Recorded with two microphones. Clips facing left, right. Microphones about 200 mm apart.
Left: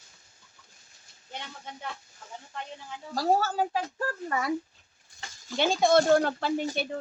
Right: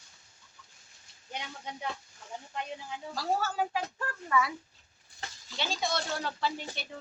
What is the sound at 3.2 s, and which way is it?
Speech, 40° left (ahead or behind).